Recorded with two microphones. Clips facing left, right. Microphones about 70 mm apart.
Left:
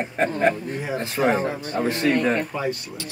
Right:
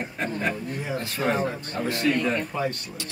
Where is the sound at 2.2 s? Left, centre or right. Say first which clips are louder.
Left 4 dB; left.